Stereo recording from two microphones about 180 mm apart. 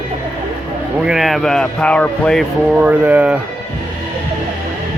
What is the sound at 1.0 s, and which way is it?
Speech, centre (ahead or behind).